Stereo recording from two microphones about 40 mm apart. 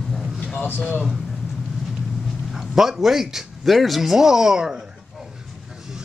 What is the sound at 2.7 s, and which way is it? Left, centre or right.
Speech, centre.